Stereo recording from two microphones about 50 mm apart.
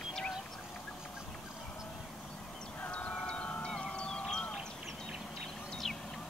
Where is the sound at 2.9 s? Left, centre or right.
Left.